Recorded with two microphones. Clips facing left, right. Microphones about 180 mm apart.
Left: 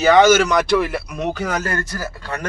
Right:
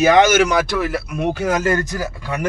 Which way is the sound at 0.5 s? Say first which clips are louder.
Left 2 dB; centre (ahead or behind).